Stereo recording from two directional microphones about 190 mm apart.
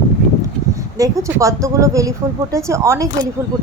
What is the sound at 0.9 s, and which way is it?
A woman's voice, 15° right (ahead or behind).